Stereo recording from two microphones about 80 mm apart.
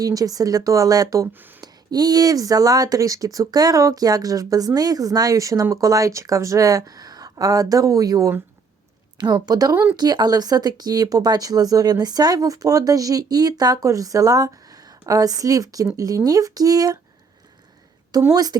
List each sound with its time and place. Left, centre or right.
0.0 s speech: right
1.3 s speech: right
1.6 s speech: right
9.1 s speech: right
13.8 s speech: right
18.1 s speech: right